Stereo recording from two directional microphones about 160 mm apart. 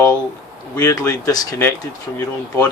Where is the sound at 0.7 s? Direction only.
25° left (ahead or behind).